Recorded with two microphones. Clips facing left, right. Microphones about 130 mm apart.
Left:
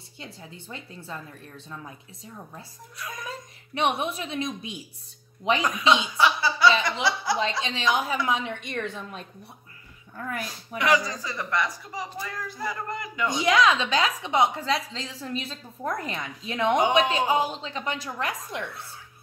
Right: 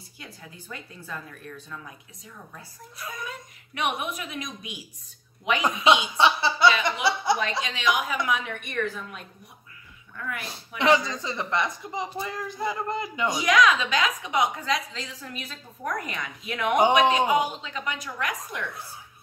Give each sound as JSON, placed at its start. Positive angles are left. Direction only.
{"t": 0.2, "sound": "a woman's voice", "side_deg": 25}
{"t": 2.2, "sound": "a woman's voice", "side_deg": 30}
{"t": 5.6, "sound": "a woman's voice", "side_deg": -25}
{"t": 6.1, "sound": "a sound", "side_deg": -25}
{"t": 6.8, "sound": "speech", "side_deg": -25}
{"t": 7.6, "sound": "a woman's voice", "side_deg": 30}
{"t": 10.8, "sound": "a woman's voice", "side_deg": -25}
{"t": 13.3, "sound": "a woman's voice", "side_deg": 30}